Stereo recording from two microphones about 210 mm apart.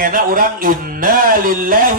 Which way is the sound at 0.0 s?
40° right (ahead or behind).